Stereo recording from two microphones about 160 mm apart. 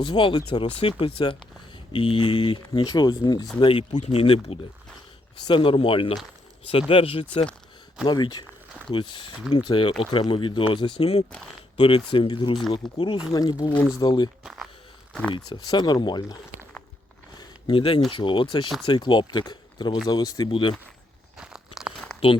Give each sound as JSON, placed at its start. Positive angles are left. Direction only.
{"t": 0.0, "sound": "speech", "side_deg": 30}
{"t": 3.9, "sound": "speech", "side_deg": 40}
{"t": 12.8, "sound": "speech", "side_deg": 0}
{"t": 13.3, "sound": "speech", "side_deg": 25}
{"t": 14.4, "sound": "speech", "side_deg": 0}
{"t": 15.5, "sound": "speech", "side_deg": 25}
{"t": 17.3, "sound": "a sound", "side_deg": 30}
{"t": 18.1, "sound": "speech", "side_deg": 30}
{"t": 21.3, "sound": "a sound", "side_deg": -5}